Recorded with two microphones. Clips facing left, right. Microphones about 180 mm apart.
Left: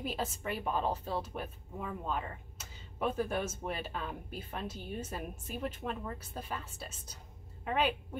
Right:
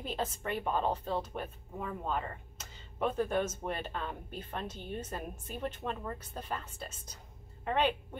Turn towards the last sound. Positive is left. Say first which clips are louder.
# right 1 dB
turn(degrees=5)  # may be behind; listen again after turning